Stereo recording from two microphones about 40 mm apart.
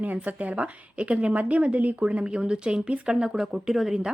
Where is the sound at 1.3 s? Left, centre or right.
Right.